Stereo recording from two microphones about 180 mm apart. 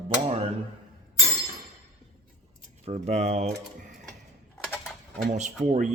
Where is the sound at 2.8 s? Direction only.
40° right (ahead or behind).